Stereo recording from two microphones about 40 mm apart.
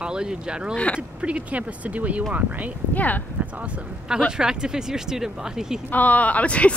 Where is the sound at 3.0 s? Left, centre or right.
Left.